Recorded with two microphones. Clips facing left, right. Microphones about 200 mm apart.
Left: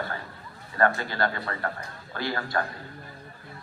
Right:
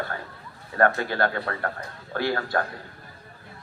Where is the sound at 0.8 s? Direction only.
60° right (ahead or behind).